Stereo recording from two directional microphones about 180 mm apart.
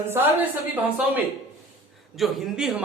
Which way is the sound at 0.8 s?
10° right (ahead or behind).